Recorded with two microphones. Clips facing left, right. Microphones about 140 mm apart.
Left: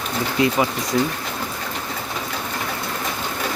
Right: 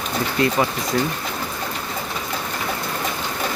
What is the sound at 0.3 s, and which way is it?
Speech, 10° left (ahead or behind).